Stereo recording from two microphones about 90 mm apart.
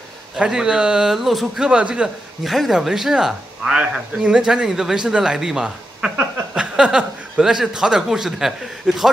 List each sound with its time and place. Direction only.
0.4 s speech: 10° right (ahead or behind)